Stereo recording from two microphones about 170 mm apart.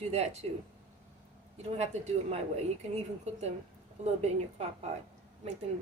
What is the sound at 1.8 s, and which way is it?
Speech, 40° right (ahead or behind).